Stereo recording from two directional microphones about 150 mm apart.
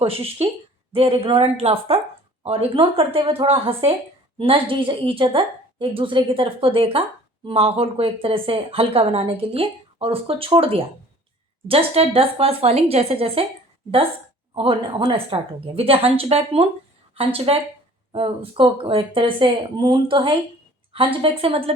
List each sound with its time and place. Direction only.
0.0 s speech: 40° right (ahead or behind)
14.5 s speech: 35° right (ahead or behind)